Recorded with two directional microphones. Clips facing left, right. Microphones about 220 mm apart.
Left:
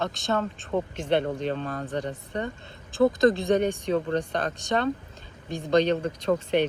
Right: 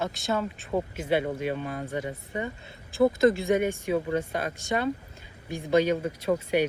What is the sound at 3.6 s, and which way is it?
Speech, 5° right (ahead or behind).